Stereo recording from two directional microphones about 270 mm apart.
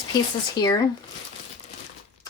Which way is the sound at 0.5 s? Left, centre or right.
Centre.